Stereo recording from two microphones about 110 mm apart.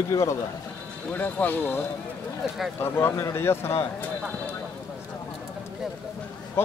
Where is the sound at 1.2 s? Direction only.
15° left (ahead or behind).